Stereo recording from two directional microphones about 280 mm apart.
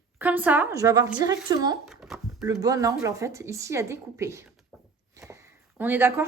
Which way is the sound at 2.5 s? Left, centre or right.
Centre.